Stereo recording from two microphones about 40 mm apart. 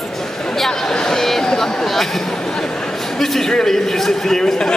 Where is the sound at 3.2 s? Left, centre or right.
Centre.